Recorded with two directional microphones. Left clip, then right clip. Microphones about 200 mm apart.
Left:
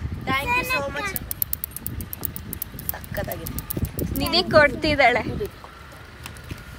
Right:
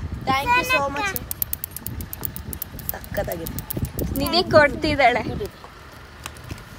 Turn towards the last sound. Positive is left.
turn(degrees=-15)  # may be behind; listen again after turning